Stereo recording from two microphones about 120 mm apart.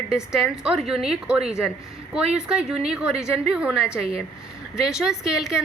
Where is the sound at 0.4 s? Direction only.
5° right (ahead or behind).